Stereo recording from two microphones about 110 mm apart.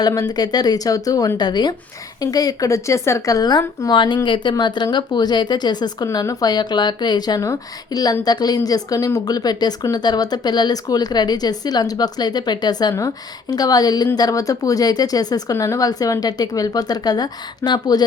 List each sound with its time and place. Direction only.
0.0 s speech: 35° left (ahead or behind)